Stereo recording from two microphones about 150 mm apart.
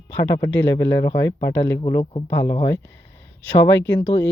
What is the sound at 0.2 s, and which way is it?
Speech, 25° left (ahead or behind).